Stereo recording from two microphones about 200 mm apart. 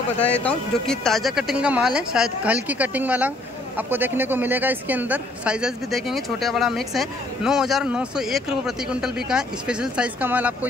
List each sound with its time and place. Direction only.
0.2 s speech: 5° left (ahead or behind); by 10.7 s 10° right (ahead or behind)